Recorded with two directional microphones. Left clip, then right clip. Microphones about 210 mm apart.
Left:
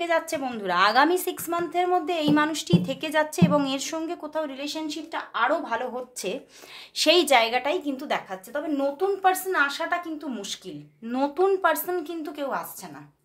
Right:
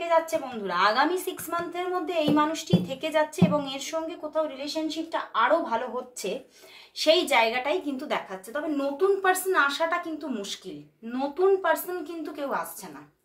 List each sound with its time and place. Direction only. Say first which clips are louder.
0.0 s a woman's voice: right 1 dB; 55° left (ahead or behind); by 9.9 s 30° left (ahead or behind)
11.1 s a woman's voice: left 1 dB; 40° left (ahead or behind)